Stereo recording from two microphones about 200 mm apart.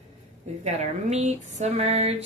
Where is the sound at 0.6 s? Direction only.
35° right (ahead or behind).